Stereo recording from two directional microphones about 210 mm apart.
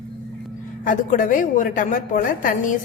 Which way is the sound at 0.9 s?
40° left (ahead or behind).